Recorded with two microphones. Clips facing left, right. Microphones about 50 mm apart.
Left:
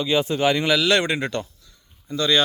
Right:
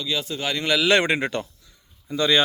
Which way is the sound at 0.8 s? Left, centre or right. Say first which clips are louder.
Right 1 dB; right.